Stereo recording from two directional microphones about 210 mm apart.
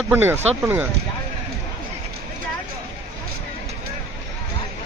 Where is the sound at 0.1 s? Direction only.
10° right (ahead or behind).